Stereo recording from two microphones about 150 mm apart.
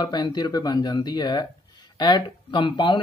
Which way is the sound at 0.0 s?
25° left (ahead or behind).